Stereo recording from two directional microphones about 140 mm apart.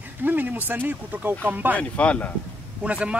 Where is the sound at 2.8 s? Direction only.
10° right (ahead or behind).